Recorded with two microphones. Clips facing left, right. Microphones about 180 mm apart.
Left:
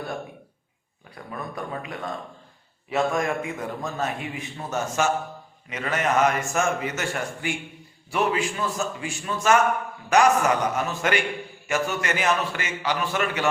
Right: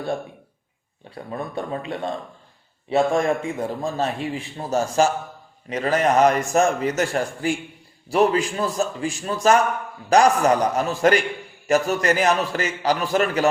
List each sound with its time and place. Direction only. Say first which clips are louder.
1.1 s a man's voice: right 5 dB; 30° right (ahead or behind)